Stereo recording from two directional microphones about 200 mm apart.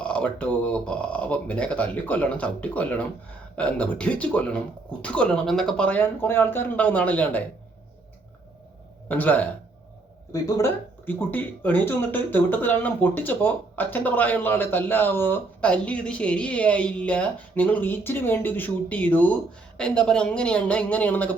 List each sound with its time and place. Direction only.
0.0 s speech: 5° left (ahead or behind)
9.0 s speech: 10° left (ahead or behind)
10.6 s speech: 10° left (ahead or behind)